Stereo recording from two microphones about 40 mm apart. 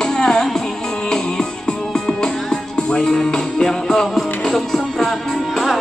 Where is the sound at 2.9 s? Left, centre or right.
Centre.